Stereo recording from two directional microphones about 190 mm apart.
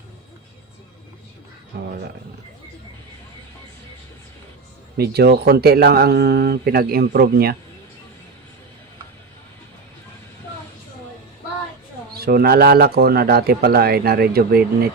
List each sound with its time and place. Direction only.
1.7 s speech: 60° right (ahead or behind)
4.9 s speech: 55° right (ahead or behind)
12.1 s speech: 55° right (ahead or behind)